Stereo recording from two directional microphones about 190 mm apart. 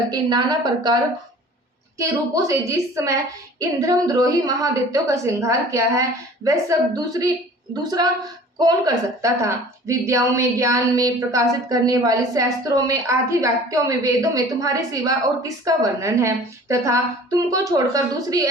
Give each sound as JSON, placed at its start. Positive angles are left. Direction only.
{"t": 0.1, "sound": "a woman's voice", "side_deg": -20}
{"t": 2.0, "sound": "a woman's voice", "side_deg": -15}